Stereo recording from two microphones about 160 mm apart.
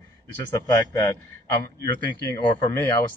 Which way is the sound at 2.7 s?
15° left (ahead or behind).